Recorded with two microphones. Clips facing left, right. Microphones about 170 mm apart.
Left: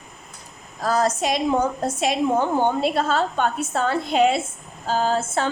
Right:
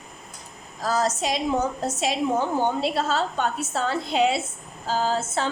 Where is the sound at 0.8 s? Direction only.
55° left (ahead or behind).